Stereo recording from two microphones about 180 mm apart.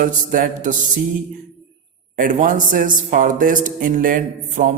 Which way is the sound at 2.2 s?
50° right (ahead or behind).